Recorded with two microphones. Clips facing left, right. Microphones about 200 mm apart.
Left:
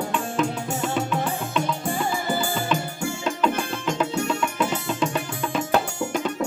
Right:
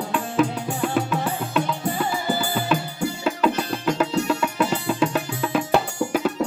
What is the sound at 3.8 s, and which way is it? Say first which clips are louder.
Music: right 4 dB; 5° right (ahead or behind).